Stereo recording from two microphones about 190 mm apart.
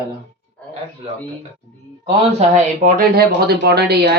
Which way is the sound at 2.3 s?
40° right (ahead or behind).